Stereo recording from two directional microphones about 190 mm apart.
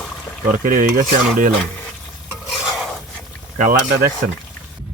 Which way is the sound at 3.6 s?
45° right (ahead or behind).